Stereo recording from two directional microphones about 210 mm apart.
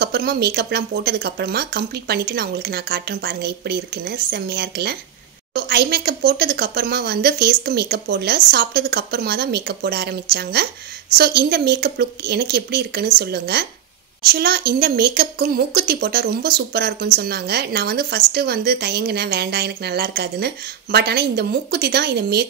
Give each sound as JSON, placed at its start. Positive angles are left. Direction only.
{"t": 0.0, "sound": "a woman's voice", "side_deg": -50}